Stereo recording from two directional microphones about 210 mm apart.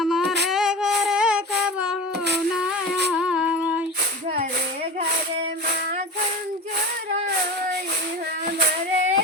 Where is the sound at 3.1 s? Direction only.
5° right (ahead or behind).